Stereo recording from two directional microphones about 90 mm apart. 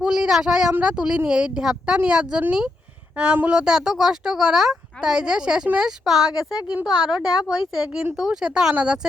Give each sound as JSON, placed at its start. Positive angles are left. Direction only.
{"t": 0.0, "sound": "speech", "side_deg": -5}